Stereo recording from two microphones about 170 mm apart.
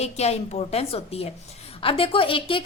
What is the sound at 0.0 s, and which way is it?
A woman's voice, 40° left (ahead or behind).